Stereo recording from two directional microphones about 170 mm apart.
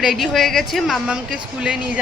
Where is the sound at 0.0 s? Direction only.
Centre (ahead or behind).